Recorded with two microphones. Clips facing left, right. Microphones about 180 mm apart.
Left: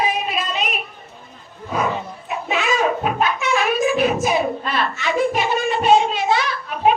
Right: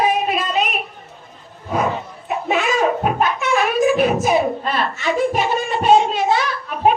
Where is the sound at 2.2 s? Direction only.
45° right (ahead or behind).